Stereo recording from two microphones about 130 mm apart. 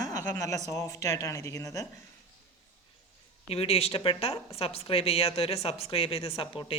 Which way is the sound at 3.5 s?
50° left (ahead or behind).